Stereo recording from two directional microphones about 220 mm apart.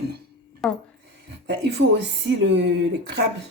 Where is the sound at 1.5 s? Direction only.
50° right (ahead or behind).